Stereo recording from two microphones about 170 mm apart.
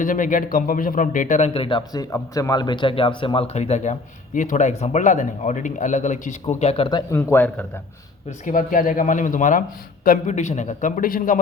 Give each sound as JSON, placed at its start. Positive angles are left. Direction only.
{"t": 0.0, "sound": "a man's voice", "side_deg": 50}
{"t": 7.1, "sound": "speech", "side_deg": 10}
{"t": 8.4, "sound": "a man's voice", "side_deg": 55}